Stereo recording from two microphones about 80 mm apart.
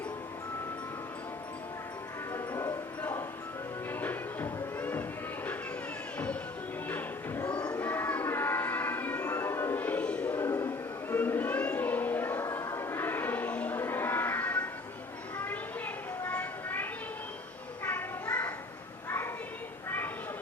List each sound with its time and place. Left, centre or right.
4.0 s music: left
6.8 s music: left
7.8 s train: left
9.8 s music: centre
10.3 s a sound: left
12.7 s music: left
16.2 s a sound: left